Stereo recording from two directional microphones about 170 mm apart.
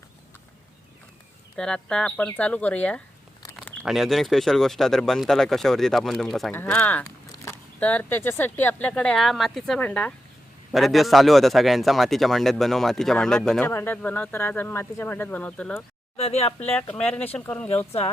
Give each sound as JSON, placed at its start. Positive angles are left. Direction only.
{"t": 1.5, "sound": "a man's voice", "side_deg": 5}
{"t": 16.1, "sound": "speech", "side_deg": 35}
{"t": 16.7, "sound": "speech", "side_deg": 10}
{"t": 17.7, "sound": "speech", "side_deg": 35}